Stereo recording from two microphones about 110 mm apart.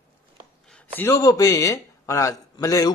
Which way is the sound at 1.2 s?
30° left (ahead or behind).